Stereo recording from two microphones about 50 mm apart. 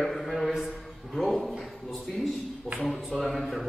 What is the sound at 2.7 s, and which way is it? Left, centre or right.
Speech, left.